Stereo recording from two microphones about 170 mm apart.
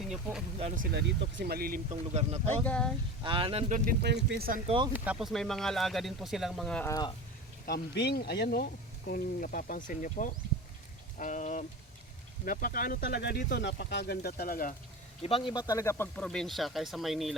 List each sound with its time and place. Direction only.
0.0 s speech: 5° right (ahead or behind)
0.8 s speech: 75° right (ahead or behind); by 1.8 s 60° right (ahead or behind)
2.6 s speech: 5° left (ahead or behind)
3.2 s speech: 30° right (ahead or behind); by 3.9 s 45° right (ahead or behind)
4.0 s speech: 85° right; by 4.6 s 60° right (ahead or behind)
4.6 s speech: 30° right (ahead or behind)
4.9 s speech: 5° right (ahead or behind)
6.8 s speech: 20° left (ahead or behind)
7.7 s speech: 75° left (ahead or behind)
13.5 s speech: 80° left; by 14.8 s 55° left (ahead or behind)
15.2 s speech: 30° left (ahead or behind); by 17.3 s centre (ahead or behind)